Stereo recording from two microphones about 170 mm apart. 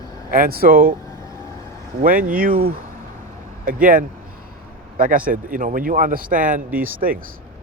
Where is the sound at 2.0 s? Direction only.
55° right (ahead or behind).